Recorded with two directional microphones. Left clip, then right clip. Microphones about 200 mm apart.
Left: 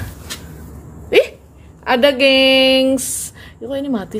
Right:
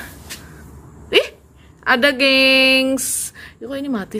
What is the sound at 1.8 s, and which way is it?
Speech, 10° right (ahead or behind).